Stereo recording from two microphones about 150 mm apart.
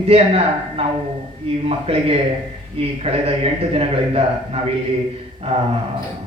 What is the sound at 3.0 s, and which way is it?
A man's voice, 40° right (ahead or behind).